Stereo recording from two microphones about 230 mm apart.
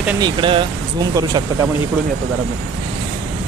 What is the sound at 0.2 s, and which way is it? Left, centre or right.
Speech, right.